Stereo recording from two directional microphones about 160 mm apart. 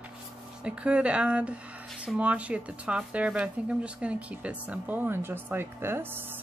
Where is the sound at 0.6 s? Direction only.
5° right (ahead or behind).